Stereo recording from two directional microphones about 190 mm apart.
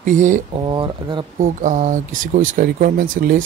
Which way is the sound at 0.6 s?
25° right (ahead or behind).